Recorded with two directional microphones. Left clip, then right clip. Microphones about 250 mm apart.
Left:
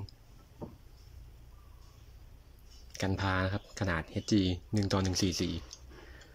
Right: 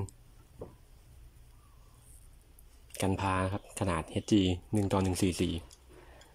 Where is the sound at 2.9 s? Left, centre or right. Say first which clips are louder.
Right 2 dB; centre.